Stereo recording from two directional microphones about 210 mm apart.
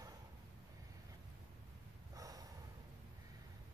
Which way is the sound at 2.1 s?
15° right (ahead or behind).